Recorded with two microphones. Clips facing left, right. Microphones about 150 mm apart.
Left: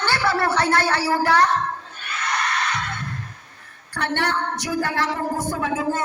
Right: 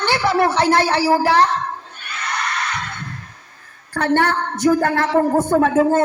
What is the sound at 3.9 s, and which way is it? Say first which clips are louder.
A woman's voice: right 6 dB; 45° right (ahead or behind).